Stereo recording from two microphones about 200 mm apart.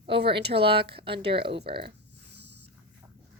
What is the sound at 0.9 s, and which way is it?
Speech, 25° right (ahead or behind).